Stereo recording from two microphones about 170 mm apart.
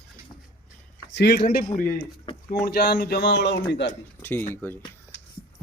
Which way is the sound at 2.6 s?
70° left (ahead or behind).